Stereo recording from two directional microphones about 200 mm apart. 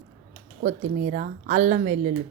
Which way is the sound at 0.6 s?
40° right (ahead or behind).